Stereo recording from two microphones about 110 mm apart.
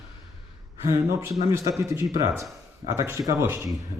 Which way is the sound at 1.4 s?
30° right (ahead or behind).